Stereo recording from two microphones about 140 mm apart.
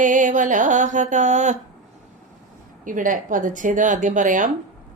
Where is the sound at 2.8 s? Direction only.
75° right (ahead or behind).